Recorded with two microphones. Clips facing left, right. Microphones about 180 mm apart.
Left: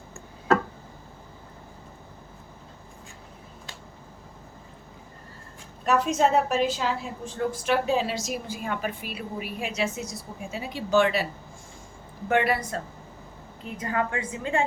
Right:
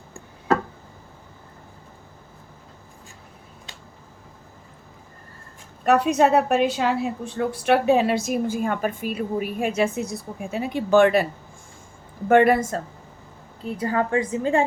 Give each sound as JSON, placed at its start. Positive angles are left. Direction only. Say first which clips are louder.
{"t": 5.8, "sound": "a woman's voice", "louder": "right 4 dB", "side_deg": -60}
{"t": 12.3, "sound": "speech", "louder": "right 8 dB", "side_deg": -50}
{"t": 13.7, "sound": "a woman's voice", "louder": "right 5 dB", "side_deg": -35}